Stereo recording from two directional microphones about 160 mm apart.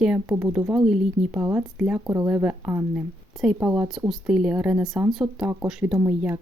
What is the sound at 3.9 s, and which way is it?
A woman's voice, 5° right (ahead or behind).